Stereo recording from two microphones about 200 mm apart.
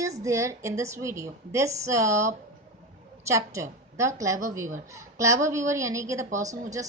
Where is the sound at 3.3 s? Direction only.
15° right (ahead or behind).